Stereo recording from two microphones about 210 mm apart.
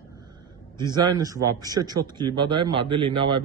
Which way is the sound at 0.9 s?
15° right (ahead or behind).